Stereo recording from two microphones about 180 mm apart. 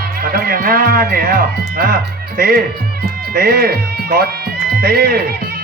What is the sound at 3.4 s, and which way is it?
Speech, 60° right (ahead or behind).